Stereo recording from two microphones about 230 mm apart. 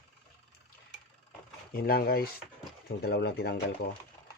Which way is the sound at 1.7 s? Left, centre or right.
Left.